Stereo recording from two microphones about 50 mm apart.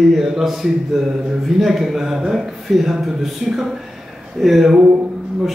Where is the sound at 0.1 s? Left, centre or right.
Centre.